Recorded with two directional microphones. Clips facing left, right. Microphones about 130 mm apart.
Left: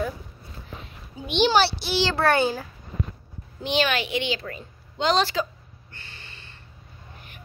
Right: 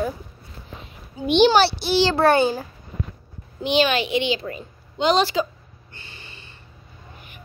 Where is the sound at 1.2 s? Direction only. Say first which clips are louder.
Right 5 dB; 60° right (ahead or behind).